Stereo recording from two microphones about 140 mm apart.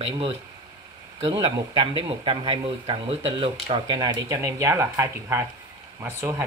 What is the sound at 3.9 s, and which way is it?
Speech, 30° right (ahead or behind).